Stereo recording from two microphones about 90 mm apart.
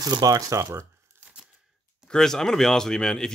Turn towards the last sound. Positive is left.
turn(degrees=5)  # may be behind; listen again after turning